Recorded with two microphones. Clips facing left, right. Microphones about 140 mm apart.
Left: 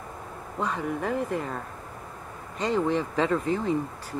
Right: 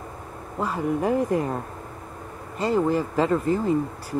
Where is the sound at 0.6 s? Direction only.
5° right (ahead or behind).